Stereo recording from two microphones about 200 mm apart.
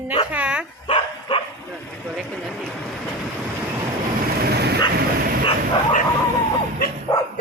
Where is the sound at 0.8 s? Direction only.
25° left (ahead or behind).